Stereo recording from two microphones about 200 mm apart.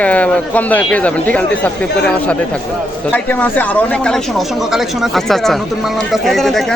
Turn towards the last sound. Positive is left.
turn(degrees=0)  # may be behind; listen again after turning